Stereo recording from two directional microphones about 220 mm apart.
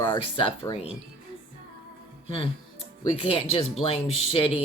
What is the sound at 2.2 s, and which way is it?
Speech, 25° left (ahead or behind).